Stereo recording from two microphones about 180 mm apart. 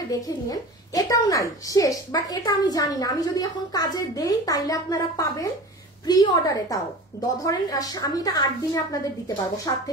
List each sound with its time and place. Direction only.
0.1 s a woman's voice: 20° left (ahead or behind)